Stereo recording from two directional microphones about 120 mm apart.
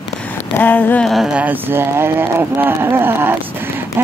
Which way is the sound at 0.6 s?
15° left (ahead or behind).